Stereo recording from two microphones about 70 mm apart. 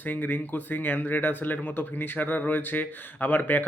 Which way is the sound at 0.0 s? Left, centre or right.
Left.